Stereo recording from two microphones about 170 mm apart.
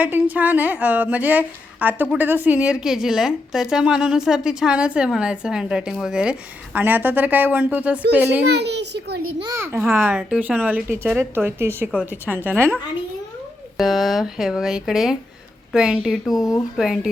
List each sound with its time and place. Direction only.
0.0 s a child's voice: 10° right (ahead or behind)
8.4 s a child's voice: 85° right
9.4 s a child's voice: 15° right (ahead or behind)
13.7 s a woman's voice: centre (ahead or behind)